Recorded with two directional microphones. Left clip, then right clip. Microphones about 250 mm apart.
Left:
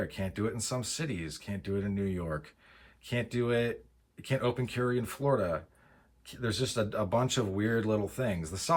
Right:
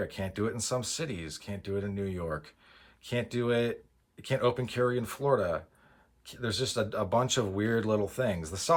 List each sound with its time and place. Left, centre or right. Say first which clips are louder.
0.0 s speech: right 1 dB; centre